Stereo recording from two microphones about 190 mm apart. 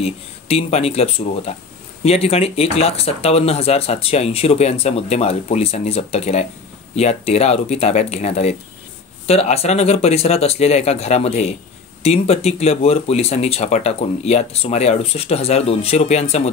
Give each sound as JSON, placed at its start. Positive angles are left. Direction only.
{"t": 0.0, "sound": "speech", "side_deg": 30}